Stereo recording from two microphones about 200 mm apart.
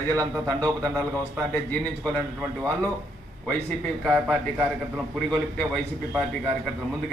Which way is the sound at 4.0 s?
5° left (ahead or behind).